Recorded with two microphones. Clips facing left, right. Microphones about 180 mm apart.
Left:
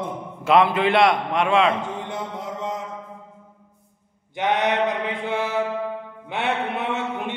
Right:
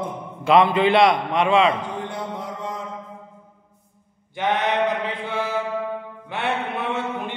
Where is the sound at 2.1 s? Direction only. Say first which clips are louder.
Even; 20° left (ahead or behind).